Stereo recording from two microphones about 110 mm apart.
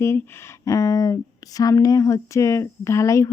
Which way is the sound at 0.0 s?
25° left (ahead or behind).